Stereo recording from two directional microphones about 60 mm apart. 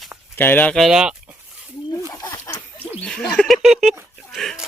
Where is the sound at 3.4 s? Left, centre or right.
Centre.